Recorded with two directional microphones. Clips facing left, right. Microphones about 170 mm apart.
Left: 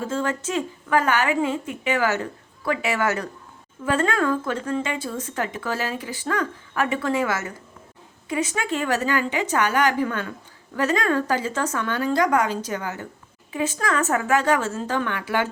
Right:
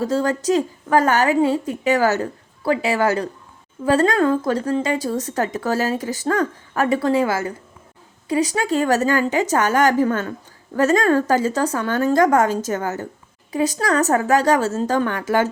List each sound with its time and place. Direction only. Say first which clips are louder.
0.0 s a woman's voice: right 6 dB; 35° right (ahead or behind)